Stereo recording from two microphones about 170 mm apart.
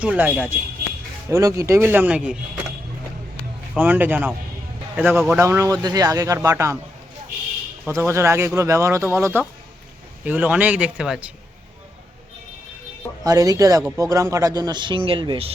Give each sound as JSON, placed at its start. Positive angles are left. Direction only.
{"t": 0.0, "sound": "speech", "side_deg": -5}
{"t": 1.3, "sound": "speech", "side_deg": -20}
{"t": 3.8, "sound": "speech", "side_deg": -10}
{"t": 5.4, "sound": "speech", "side_deg": -15}
{"t": 7.9, "sound": "speech", "side_deg": -15}
{"t": 13.2, "sound": "speech", "side_deg": -20}